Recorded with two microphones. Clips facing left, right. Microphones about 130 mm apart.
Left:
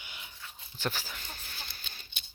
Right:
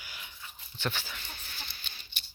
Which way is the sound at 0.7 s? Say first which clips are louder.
Even; 40° left (ahead or behind).